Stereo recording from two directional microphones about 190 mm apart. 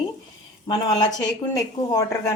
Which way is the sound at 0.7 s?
20° left (ahead or behind).